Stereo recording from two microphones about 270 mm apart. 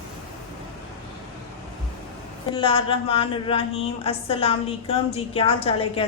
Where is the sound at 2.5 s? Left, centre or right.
Centre.